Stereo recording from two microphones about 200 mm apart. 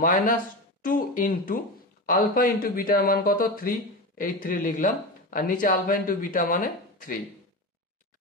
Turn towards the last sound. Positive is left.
turn(degrees=45)  # may be behind; listen again after turning